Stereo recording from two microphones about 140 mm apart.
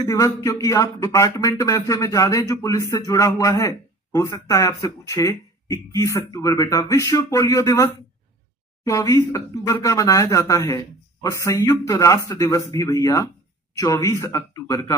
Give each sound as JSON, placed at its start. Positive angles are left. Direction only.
{"t": 0.0, "sound": "speech", "side_deg": 25}